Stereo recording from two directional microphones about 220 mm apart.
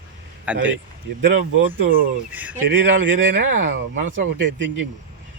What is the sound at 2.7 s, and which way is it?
Speech, 60° right (ahead or behind).